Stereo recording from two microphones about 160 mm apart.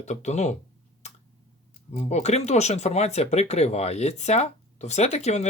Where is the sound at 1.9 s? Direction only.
45° left (ahead or behind).